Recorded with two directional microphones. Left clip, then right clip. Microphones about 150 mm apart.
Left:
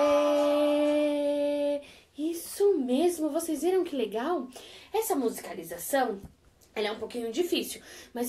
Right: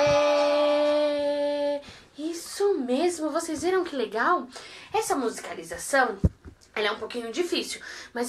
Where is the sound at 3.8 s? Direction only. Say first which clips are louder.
Right 4 dB; 5° left (ahead or behind).